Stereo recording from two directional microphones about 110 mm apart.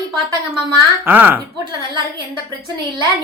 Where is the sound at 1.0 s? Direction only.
15° right (ahead or behind).